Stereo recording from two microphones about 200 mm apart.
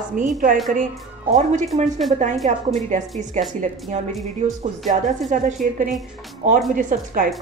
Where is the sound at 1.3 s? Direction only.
35° right (ahead or behind).